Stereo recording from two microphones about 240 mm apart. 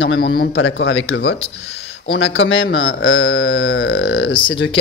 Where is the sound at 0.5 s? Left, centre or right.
Left.